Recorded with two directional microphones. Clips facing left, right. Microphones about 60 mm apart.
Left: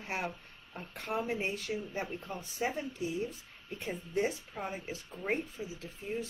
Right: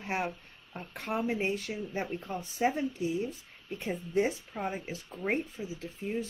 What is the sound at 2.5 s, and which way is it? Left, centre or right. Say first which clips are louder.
Speech: right 6 dB; right.